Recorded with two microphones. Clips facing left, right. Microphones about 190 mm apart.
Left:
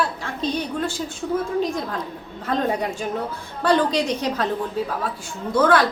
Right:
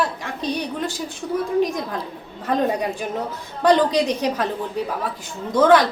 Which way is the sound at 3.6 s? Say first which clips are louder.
Right 3 dB; 15° right (ahead or behind).